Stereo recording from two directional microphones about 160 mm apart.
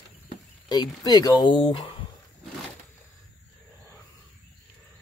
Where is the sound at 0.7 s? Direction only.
25° left (ahead or behind).